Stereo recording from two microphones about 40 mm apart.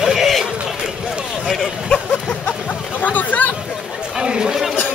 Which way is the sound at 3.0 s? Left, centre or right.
Left.